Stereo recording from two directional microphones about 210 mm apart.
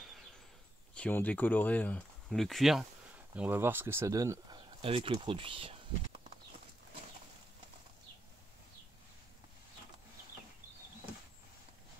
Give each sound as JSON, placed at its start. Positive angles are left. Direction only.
{"t": 0.9, "sound": "speech", "side_deg": 5}